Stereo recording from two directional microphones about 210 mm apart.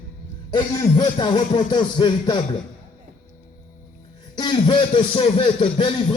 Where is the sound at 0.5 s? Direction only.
20° left (ahead or behind).